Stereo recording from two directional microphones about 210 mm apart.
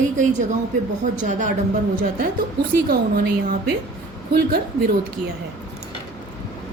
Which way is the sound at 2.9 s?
50° right (ahead or behind).